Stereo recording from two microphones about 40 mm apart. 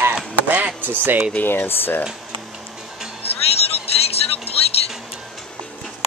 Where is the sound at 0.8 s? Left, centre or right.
Right.